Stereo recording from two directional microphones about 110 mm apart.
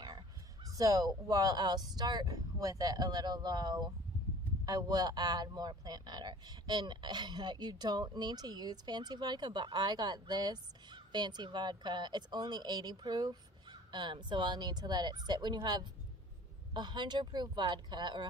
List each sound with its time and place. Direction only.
0.0 s a man's voice: 40° right (ahead or behind)